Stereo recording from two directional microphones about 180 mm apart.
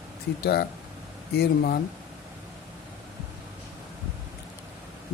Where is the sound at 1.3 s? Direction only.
65° left (ahead or behind).